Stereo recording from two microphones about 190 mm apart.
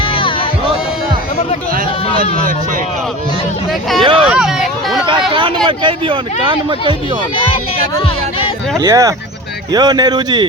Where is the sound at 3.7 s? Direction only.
Centre (ahead or behind).